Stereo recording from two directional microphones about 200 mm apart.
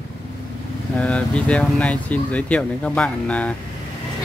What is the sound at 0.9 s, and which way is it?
Speech, 5° left (ahead or behind).